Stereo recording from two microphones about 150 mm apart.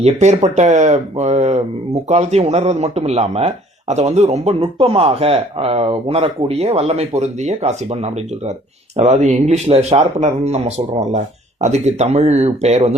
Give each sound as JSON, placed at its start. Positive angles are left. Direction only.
{"t": 0.0, "sound": "speech", "side_deg": -50}